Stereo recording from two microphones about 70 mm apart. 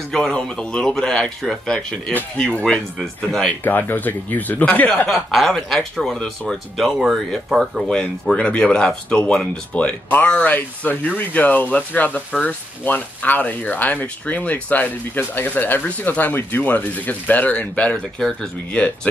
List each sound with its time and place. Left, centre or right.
0.1 s speech: centre
3.6 s speech: left
5.3 s speech: centre
7.9 s speech: centre
10.0 s speech: left; by 18.8 s centre